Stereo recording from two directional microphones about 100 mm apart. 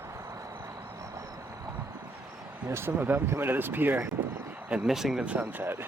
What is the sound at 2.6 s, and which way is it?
Speech, 25° right (ahead or behind).